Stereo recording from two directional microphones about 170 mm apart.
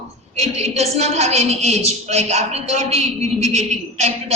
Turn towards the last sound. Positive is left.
turn(degrees=-40)  # may be behind; listen again after turning